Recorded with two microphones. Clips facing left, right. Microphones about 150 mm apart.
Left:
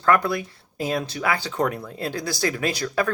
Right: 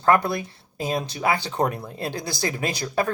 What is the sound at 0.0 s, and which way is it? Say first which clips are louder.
Speech: even; 25° right (ahead or behind).